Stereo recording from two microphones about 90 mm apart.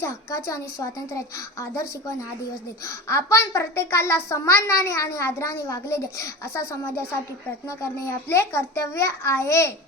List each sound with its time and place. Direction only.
0.0 s a woman's voice: 35° left (ahead or behind)